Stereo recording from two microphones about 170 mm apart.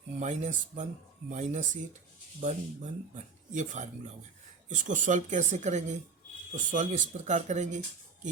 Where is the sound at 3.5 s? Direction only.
45° right (ahead or behind).